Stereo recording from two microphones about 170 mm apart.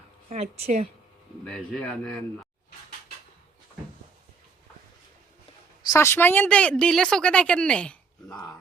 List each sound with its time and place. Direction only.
0.3 s speech: 40° right (ahead or behind)
1.5 s a man's voice: 5° left (ahead or behind)
5.9 s a woman's voice: 15° left (ahead or behind)